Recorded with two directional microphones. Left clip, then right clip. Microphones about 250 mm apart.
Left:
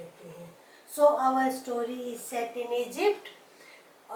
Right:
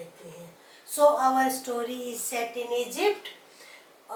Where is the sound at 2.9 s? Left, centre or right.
Centre.